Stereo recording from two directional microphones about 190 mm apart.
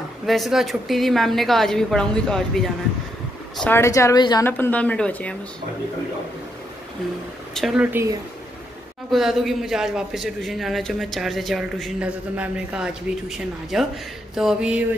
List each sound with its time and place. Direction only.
0.3 s a man's voice: centre (ahead or behind); by 4.5 s 20° left (ahead or behind)
4.5 s a woman's voice: 10° left (ahead or behind)
7.5 s speech: 5° right (ahead or behind)
9.1 s a man's voice: centre (ahead or behind)